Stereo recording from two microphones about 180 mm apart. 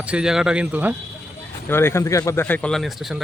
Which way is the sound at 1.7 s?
15° left (ahead or behind).